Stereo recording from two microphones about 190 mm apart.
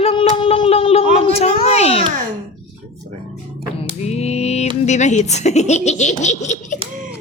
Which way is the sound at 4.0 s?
35° left (ahead or behind).